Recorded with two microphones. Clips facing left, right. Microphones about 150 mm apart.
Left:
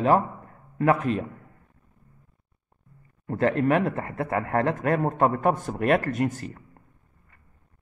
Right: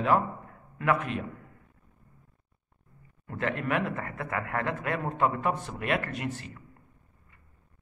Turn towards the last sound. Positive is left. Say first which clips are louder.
# left 8 dB
turn(degrees=45)  # may be behind; listen again after turning